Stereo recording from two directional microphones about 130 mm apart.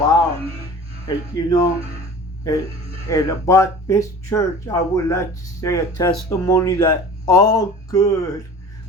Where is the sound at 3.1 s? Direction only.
25° left (ahead or behind).